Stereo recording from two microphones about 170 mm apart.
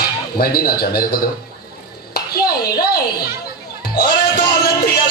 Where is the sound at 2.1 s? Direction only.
60° left (ahead or behind).